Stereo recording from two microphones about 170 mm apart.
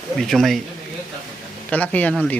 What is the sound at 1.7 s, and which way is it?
Speech, 10° left (ahead or behind).